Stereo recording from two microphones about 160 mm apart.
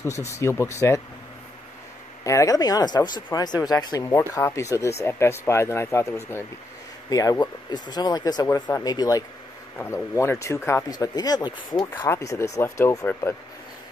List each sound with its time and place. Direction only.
0.3 s speech: 15° left (ahead or behind)
2.2 s speech: 20° left (ahead or behind)